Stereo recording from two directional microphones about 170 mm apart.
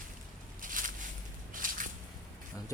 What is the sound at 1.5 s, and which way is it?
Squish, 55° right (ahead or behind).